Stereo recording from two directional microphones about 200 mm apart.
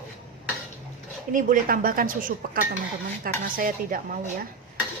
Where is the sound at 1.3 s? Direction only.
40° right (ahead or behind).